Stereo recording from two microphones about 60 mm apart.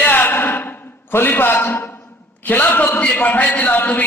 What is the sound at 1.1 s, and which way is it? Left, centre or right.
Speech, left.